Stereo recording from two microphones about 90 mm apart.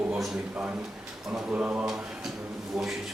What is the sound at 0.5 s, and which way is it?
Speech, 20° right (ahead or behind).